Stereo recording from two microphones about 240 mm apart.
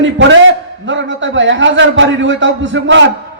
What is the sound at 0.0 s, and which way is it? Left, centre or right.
A man's voice, right.